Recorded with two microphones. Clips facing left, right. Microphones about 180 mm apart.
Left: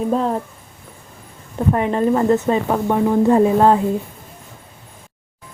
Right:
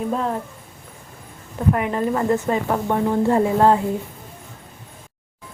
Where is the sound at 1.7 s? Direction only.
30° left (ahead or behind).